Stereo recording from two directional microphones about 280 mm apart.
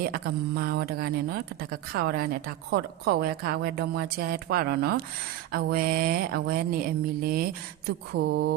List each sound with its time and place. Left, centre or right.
0.1 s speech: right